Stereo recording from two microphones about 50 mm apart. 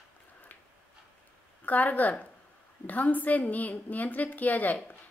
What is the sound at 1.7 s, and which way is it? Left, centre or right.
A woman's voice, left.